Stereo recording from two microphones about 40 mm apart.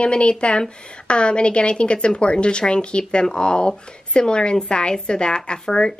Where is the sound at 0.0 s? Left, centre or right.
Left.